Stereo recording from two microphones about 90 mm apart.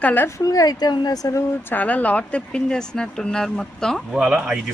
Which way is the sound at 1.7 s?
15° left (ahead or behind).